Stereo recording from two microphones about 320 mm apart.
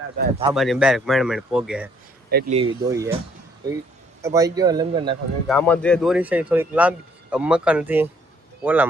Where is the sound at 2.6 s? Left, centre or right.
Centre.